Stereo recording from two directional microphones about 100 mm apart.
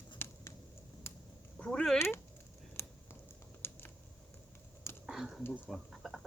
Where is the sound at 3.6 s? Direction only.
25° left (ahead or behind).